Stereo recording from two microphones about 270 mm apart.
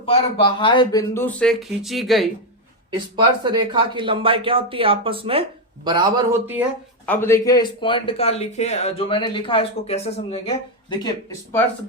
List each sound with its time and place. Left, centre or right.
0.0 s speech: centre
2.9 s speech: centre
7.0 s speech: centre